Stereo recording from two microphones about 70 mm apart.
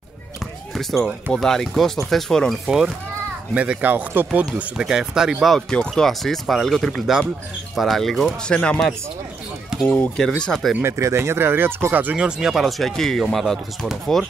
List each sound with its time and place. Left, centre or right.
0.7 s speech: centre
2.6 s speech: centre
3.5 s speech: right
4.3 s speech: centre
5.7 s speech: centre
8.5 s speech: centre
10.8 s speech: right
12.3 s speech: centre